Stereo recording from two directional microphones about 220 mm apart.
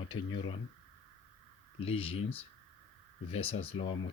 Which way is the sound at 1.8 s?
25° left (ahead or behind).